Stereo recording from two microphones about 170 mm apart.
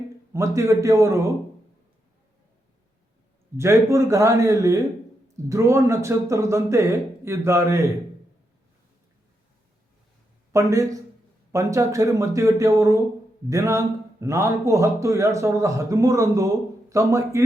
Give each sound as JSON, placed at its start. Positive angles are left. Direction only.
{"t": 0.3, "sound": "speech", "side_deg": -20}
{"t": 3.6, "sound": "speech", "side_deg": -15}
{"t": 10.5, "sound": "speech", "side_deg": -20}